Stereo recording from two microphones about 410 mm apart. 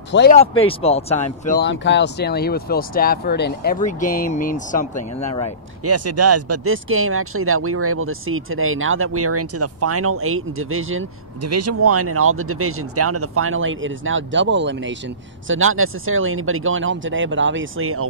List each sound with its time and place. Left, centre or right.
0.1 s speech: left
5.9 s speech: right